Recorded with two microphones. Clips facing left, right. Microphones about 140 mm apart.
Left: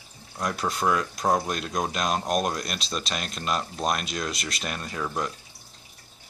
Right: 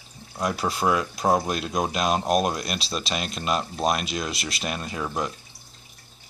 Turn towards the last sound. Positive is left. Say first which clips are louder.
# right 1 dB
turn(degrees=-10)  # may be behind; listen again after turning